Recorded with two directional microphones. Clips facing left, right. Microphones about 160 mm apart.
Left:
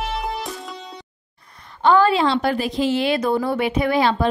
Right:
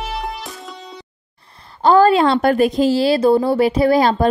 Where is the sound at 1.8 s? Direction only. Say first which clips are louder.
Right 4 dB; 40° right (ahead or behind).